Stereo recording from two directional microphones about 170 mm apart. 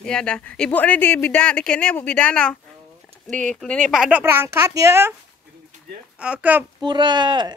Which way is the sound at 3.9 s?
5° right (ahead or behind).